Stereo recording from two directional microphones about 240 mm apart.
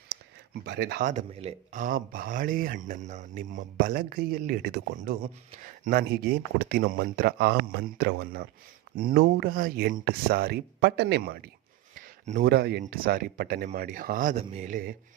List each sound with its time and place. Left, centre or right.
0.6 s speech: right